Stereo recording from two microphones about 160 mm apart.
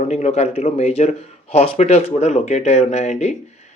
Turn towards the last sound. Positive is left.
turn(degrees=45)  # may be behind; listen again after turning